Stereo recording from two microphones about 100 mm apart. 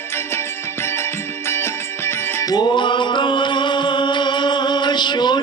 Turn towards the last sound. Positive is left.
turn(degrees=50)  # may be behind; listen again after turning